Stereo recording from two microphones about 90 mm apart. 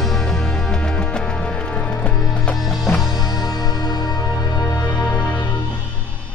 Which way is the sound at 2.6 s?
Centre (ahead or behind).